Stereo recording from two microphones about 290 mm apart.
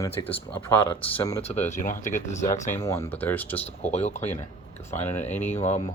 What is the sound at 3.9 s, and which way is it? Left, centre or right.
Speech, left.